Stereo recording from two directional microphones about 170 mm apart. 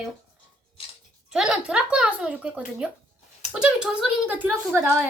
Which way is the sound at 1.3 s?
5° right (ahead or behind).